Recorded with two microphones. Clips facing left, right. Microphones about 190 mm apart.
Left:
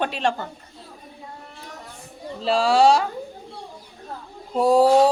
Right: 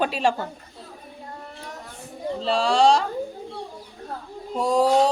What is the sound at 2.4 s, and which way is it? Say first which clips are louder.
Speech: left 2 dB; 5° left (ahead or behind).